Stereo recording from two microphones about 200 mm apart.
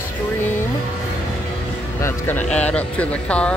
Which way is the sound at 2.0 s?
10° left (ahead or behind).